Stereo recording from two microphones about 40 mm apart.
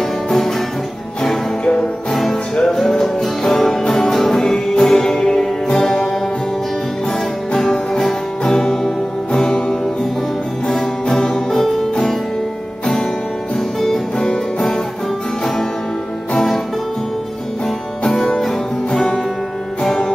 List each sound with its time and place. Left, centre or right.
0.0 s music: centre
1.6 s music: left
2.0 s music: centre
7.1 s music: centre
14.1 s music: centre
16.3 s music: centre
18.4 s music: centre